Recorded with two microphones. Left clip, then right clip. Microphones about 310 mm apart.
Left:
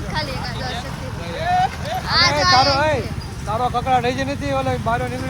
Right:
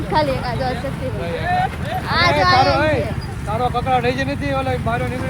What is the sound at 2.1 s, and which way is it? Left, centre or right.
Speech, centre.